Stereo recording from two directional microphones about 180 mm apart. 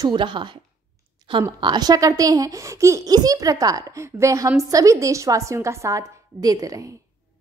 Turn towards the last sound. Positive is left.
turn(degrees=-20)  # may be behind; listen again after turning